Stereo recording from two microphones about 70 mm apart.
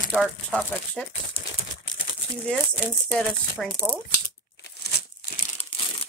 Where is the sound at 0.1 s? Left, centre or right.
Centre.